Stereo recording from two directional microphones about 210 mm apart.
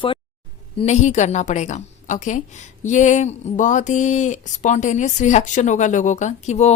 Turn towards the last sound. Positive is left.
turn(degrees=35)  # may be behind; listen again after turning